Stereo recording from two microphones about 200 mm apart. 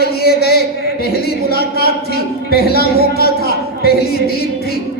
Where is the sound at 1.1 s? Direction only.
50° left (ahead or behind).